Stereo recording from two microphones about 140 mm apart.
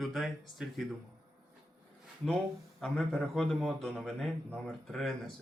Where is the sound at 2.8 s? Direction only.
Centre (ahead or behind).